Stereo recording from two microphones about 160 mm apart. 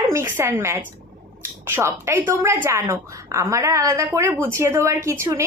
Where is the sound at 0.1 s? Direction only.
15° right (ahead or behind).